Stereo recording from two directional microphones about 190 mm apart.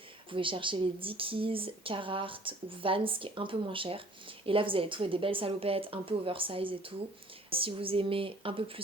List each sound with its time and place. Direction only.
0.3 s speech: 25° right (ahead or behind)